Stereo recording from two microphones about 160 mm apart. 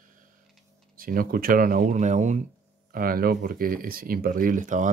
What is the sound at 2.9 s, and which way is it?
Speech, 65° right (ahead or behind).